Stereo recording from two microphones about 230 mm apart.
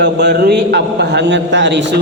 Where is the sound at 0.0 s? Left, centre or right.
Right.